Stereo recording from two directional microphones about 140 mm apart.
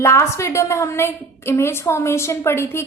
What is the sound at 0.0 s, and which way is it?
A woman's voice, 20° left (ahead or behind).